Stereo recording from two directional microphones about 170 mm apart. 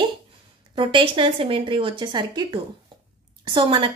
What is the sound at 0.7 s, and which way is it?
Speech, 30° right (ahead or behind).